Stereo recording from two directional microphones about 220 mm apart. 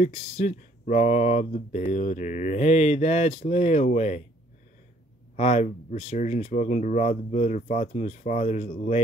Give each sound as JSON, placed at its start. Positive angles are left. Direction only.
{"t": 0.0, "sound": "speech", "side_deg": 30}
{"t": 5.3, "sound": "speech", "side_deg": 30}